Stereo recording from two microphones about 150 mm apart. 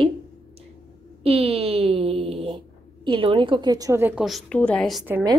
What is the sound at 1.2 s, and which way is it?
A woman's voice, 40° right (ahead or behind).